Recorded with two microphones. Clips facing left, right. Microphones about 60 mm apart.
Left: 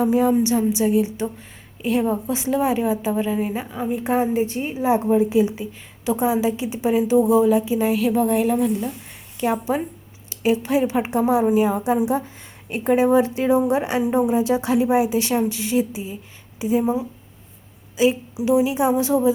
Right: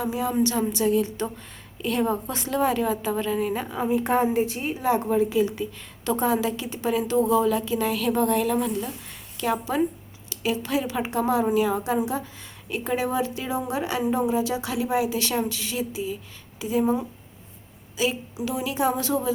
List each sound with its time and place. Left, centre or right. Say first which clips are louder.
0.0 s a woman's voice: left 9 dB; left
0.3 s a woman's voice: left 4 dB; centre
3.7 s a woman's voice: even; centre
5.0 s a woman's voice: left 4 dB; left
9.4 s speech: left 2 dB; left
16.8 s a woman's voice: left 1 dB; centre
17.9 s speech: left 7 dB; left